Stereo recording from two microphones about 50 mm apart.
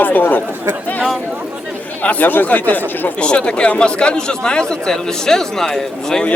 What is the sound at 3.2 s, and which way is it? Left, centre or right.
Speech, centre.